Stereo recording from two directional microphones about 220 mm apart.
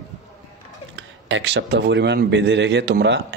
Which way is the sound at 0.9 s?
55° right (ahead or behind).